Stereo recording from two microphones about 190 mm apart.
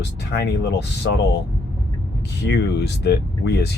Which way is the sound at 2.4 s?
60° left (ahead or behind).